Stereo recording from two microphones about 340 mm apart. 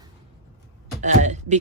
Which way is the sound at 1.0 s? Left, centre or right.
Right.